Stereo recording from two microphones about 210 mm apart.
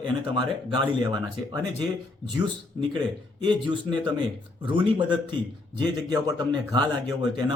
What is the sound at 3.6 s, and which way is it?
Speech, 20° right (ahead or behind).